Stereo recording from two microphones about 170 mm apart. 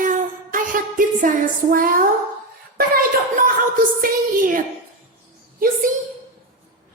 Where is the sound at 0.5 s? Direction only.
50° right (ahead or behind).